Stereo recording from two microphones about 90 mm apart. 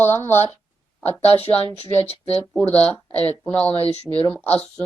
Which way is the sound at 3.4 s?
15° left (ahead or behind).